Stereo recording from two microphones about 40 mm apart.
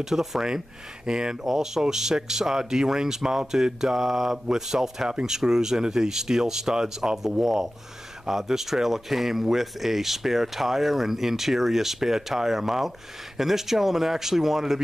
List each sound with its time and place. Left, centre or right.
0.0 s speech: centre